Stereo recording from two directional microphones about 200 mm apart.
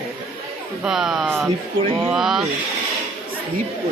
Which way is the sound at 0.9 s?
Centre (ahead or behind).